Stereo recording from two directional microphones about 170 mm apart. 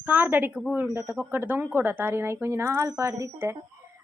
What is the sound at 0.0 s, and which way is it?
Speech, 10° right (ahead or behind).